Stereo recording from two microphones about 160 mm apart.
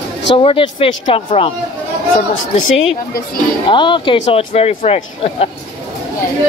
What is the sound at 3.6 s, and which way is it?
Speech, 30° left (ahead or behind).